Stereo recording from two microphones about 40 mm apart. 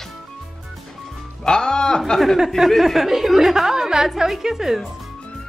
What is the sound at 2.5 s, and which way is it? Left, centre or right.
A woman's voice, centre.